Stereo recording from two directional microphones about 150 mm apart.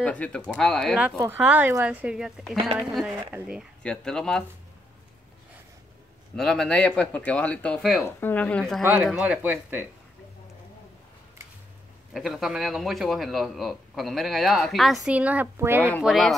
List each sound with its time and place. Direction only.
0.0 s a man's voice: 10° left (ahead or behind)
1.0 s speech: 15° right (ahead or behind)
1.4 s a man's voice: 5° right (ahead or behind)
3.3 s speech: 15° right (ahead or behind)
3.8 s a man's voice: 5° left (ahead or behind)
6.3 s speech: 5° left (ahead or behind)
8.0 s speech: 15° left (ahead or behind)
8.8 s speech: 15° right (ahead or behind)
12.1 s a man's voice: centre (ahead or behind)
16.0 s a man's voice: centre (ahead or behind)